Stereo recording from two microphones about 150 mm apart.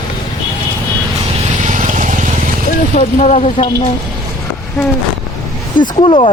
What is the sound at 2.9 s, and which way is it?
Speech, 55° left (ahead or behind).